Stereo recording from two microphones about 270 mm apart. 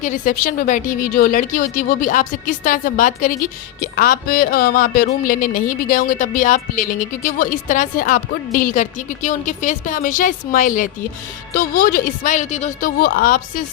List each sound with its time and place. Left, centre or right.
0.0 s a woman's voice: left